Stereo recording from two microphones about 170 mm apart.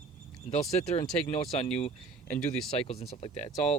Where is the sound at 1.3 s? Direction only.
40° left (ahead or behind).